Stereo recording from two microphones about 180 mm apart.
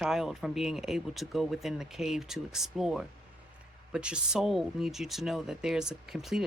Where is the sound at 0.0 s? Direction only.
Centre (ahead or behind).